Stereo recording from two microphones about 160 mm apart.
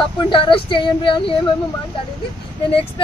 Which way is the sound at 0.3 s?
30° left (ahead or behind).